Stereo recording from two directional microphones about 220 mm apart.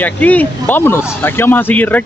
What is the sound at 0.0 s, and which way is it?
Speech, 5° left (ahead or behind).